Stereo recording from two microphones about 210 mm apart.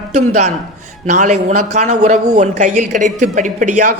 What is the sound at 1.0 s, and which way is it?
Speech, 35° right (ahead or behind).